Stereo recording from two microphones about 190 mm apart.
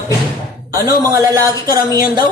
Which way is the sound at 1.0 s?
20° right (ahead or behind).